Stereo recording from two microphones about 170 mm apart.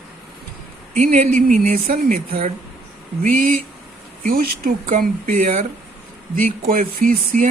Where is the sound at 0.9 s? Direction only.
50° right (ahead or behind).